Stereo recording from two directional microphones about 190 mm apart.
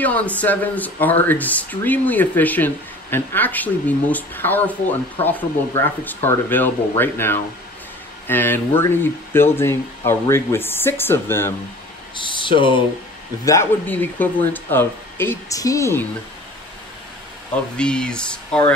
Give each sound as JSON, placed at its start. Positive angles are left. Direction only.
{"t": 0.0, "sound": "speech", "side_deg": 10}
{"t": 12.2, "sound": "speech", "side_deg": 25}
{"t": 13.5, "sound": "speech", "side_deg": 10}
{"t": 17.7, "sound": "speech", "side_deg": 5}